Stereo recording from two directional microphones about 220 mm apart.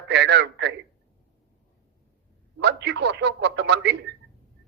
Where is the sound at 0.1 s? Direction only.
50° right (ahead or behind).